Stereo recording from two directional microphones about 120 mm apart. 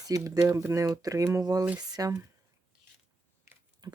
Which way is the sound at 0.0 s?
30° right (ahead or behind).